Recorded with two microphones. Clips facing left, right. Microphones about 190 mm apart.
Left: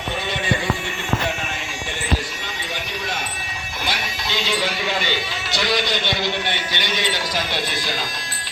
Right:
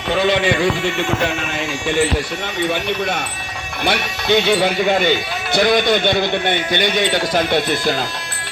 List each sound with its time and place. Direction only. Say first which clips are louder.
0.1 s speech: right 9 dB; 90° right
3.8 s speech: right 10 dB; 60° right (ahead or behind)